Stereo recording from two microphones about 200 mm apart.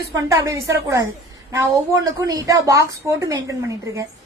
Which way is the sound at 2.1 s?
15° right (ahead or behind).